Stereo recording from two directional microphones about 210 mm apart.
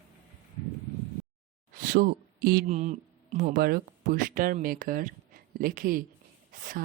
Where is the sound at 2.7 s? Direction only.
35° right (ahead or behind).